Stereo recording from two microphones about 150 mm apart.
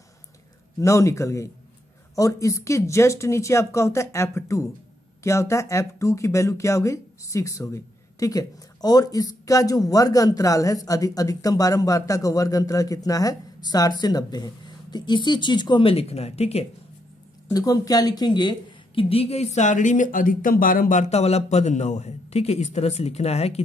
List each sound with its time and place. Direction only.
0.7 s speech: 20° left (ahead or behind); by 16.6 s 45° left (ahead or behind)
17.5 s speech: 25° left (ahead or behind); by 23.6 s 45° left (ahead or behind)